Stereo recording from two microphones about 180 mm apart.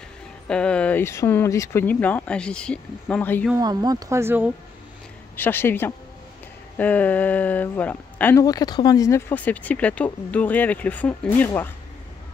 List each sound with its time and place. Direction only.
0.5 s speech: 5° left (ahead or behind)
3.5 s speech: 20° right (ahead or behind)
5.3 s speech: 10° left (ahead or behind)
9.3 s speech: 10° left (ahead or behind)